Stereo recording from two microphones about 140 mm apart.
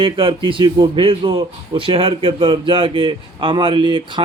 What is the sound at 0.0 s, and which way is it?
Speech, 40° right (ahead or behind).